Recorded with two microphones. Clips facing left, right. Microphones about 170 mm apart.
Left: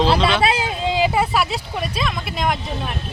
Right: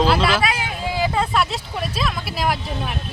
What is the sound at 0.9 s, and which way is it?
Speech, 15° left (ahead or behind).